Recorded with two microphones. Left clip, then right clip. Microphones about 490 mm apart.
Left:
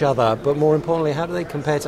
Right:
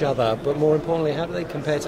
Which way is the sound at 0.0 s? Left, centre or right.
Left.